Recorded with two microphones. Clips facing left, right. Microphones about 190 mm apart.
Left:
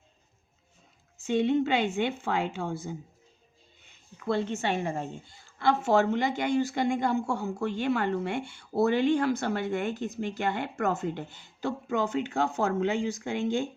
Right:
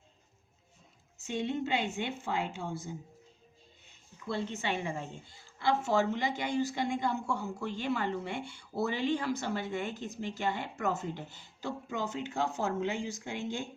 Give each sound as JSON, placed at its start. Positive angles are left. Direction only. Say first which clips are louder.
{"t": 1.3, "sound": "a woman's voice", "louder": "left 8 dB", "side_deg": 70}
{"t": 4.2, "sound": "a woman's voice", "louder": "left 7 dB", "side_deg": 55}
{"t": 5.5, "sound": "speech", "louder": "left 5 dB", "side_deg": 65}
{"t": 8.9, "sound": "speech", "louder": "left 7 dB", "side_deg": 55}